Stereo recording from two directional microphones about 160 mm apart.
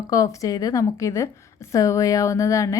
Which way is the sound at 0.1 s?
20° left (ahead or behind).